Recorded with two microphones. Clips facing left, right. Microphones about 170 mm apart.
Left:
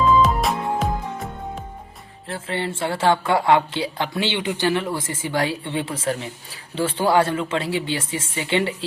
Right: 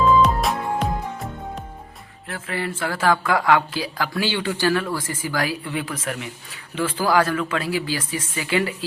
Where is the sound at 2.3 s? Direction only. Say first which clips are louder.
Left 1 dB; 30° left (ahead or behind).